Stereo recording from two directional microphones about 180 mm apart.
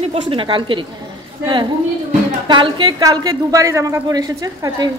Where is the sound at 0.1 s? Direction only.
30° right (ahead or behind).